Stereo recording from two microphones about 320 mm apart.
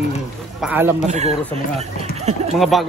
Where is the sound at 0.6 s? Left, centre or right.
Centre.